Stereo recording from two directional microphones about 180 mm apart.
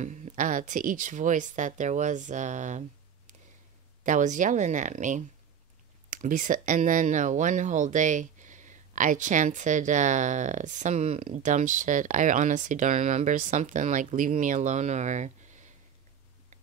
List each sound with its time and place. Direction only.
0.0 s speech: 45° right (ahead or behind)
4.0 s speech: 45° right (ahead or behind)